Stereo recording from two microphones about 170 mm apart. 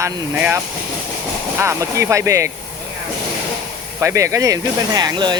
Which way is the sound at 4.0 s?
15° right (ahead or behind).